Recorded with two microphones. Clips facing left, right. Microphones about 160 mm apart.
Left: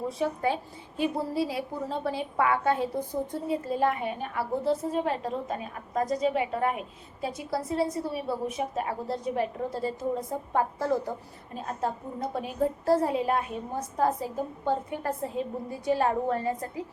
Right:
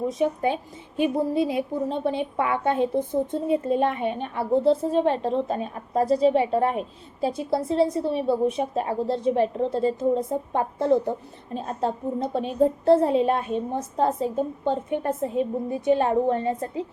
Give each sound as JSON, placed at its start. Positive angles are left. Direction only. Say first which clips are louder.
{"t": 0.1, "sound": "a woman's voice", "louder": "right 4 dB", "side_deg": -20}